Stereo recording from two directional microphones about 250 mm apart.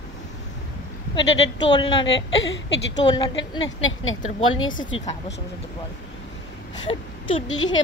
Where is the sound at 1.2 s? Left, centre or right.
Left.